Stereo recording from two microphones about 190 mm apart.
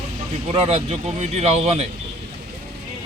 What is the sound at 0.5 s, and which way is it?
A man's voice, 30° right (ahead or behind).